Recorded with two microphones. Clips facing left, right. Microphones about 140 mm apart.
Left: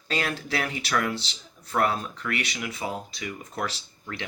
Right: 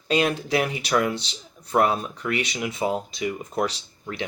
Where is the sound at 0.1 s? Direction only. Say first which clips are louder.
Right 7 dB; 20° right (ahead or behind).